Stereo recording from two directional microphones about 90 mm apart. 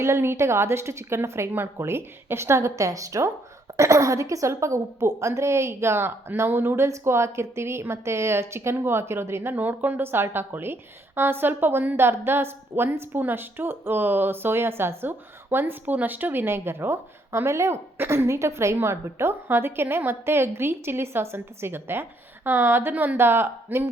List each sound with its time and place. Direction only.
0.0 s a woman's voice: 30° right (ahead or behind)